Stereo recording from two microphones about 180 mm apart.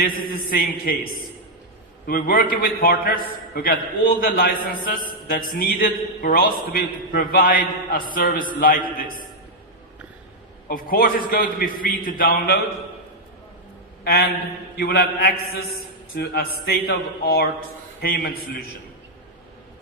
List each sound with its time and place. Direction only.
0.0 s a man's voice: 55° left (ahead or behind)
2.0 s a man's voice: 55° left (ahead or behind)
10.7 s a man's voice: 55° left (ahead or behind)
14.8 s a man's voice: 60° left (ahead or behind)